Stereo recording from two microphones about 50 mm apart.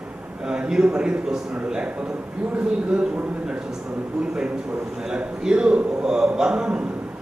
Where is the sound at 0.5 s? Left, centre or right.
Centre.